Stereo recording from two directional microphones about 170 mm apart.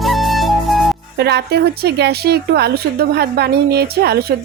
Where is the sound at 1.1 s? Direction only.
75° right (ahead or behind).